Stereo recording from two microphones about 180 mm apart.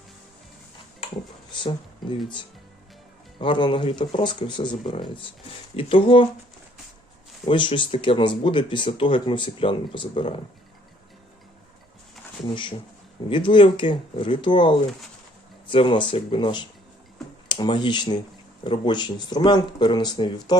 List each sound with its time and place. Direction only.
1.5 s speech: 25° left (ahead or behind)
3.3 s speech: 25° left (ahead or behind)
7.4 s speech: 30° left (ahead or behind)
13.3 s speech: 25° left (ahead or behind)